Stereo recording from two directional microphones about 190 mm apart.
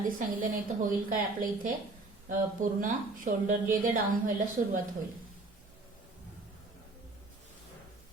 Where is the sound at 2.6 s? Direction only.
45° right (ahead or behind).